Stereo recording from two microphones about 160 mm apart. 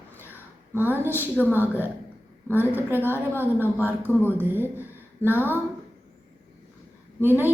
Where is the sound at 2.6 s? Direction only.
10° right (ahead or behind).